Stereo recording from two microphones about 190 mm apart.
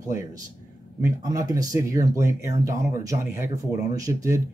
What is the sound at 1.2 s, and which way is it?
Speech, 20° right (ahead or behind).